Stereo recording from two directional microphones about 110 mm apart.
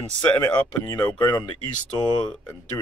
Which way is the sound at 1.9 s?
40° left (ahead or behind).